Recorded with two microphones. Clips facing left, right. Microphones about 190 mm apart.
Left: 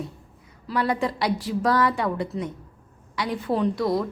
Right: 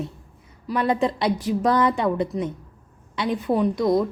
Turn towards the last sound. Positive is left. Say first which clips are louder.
# right 3 dB
turn(degrees=-20)  # may be behind; listen again after turning